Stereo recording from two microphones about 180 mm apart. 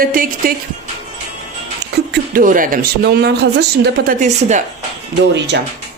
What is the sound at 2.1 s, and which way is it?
Speech, 50° right (ahead or behind).